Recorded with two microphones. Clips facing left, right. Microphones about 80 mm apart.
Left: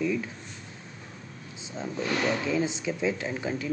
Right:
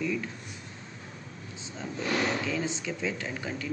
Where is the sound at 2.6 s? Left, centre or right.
Centre.